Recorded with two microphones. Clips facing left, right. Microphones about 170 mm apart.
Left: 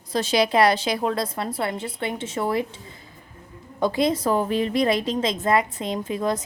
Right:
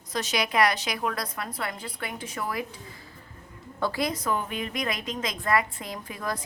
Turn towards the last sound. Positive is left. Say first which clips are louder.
# left 9 dB
turn(degrees=25)  # may be behind; listen again after turning